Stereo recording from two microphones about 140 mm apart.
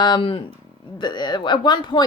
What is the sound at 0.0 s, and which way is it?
A woman's voice, 35° left (ahead or behind).